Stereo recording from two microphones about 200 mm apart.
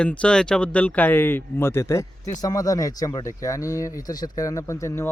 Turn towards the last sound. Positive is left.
turn(degrees=15)  # may be behind; listen again after turning